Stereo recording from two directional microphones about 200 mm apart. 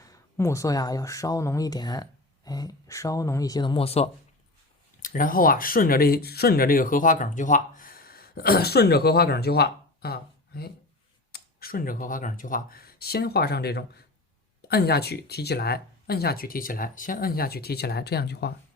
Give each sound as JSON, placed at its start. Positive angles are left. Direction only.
{"t": 0.0, "sound": "speech", "side_deg": 15}
{"t": 5.0, "sound": "speech", "side_deg": 45}